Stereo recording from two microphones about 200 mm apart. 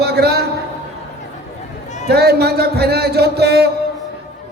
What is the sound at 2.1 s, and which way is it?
Speech, 55° right (ahead or behind).